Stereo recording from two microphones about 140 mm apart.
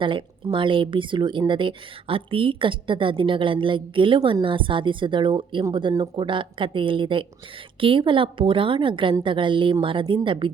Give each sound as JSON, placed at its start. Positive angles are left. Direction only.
{"t": 0.0, "sound": "speech", "side_deg": -35}